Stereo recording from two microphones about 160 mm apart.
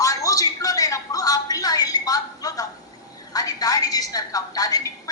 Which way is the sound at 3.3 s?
25° left (ahead or behind).